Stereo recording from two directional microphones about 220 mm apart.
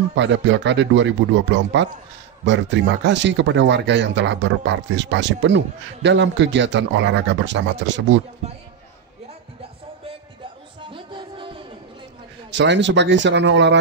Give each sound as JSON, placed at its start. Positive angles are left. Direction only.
{"t": 0.1, "sound": "speech", "side_deg": -55}
{"t": 10.8, "sound": "music", "side_deg": -20}
{"t": 12.4, "sound": "speech", "side_deg": -50}